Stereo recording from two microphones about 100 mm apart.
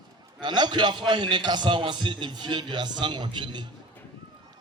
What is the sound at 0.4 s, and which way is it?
A man's voice, 50° right (ahead or behind).